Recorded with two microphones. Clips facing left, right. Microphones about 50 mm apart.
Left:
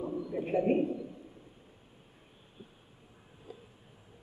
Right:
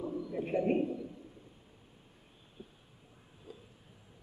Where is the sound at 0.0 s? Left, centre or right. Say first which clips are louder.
Left 2 dB; centre.